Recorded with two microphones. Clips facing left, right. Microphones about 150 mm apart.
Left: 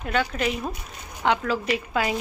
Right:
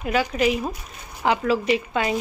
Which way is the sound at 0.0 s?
5° right (ahead or behind).